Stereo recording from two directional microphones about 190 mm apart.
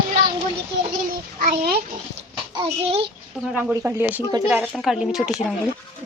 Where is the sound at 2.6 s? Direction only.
30° right (ahead or behind).